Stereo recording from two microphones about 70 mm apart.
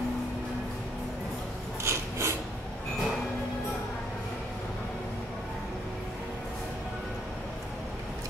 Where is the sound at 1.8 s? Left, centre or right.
Right.